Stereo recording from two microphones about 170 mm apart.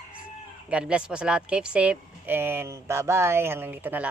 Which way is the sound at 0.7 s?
5° right (ahead or behind).